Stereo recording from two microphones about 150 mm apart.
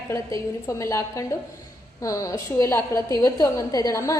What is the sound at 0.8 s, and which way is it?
A woman's voice, 20° left (ahead or behind).